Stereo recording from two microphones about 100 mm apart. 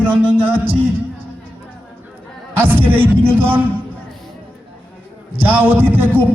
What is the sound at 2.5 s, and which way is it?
A man's voice, 20° right (ahead or behind).